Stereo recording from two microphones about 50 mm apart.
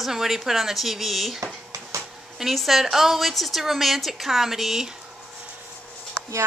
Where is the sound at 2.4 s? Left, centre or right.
Centre.